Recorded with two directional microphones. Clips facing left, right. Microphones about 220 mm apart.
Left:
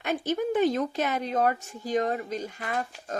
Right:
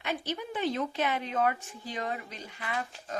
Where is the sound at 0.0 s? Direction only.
45° left (ahead or behind).